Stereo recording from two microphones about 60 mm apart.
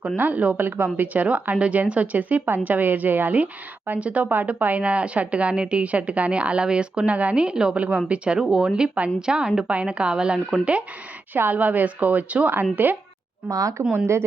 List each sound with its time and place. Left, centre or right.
0.2 s a woman's voice: right
11.5 s a woman's voice: right
13.5 s speech: right